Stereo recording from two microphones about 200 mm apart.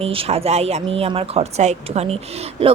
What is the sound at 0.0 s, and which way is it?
Speech, 30° right (ahead or behind).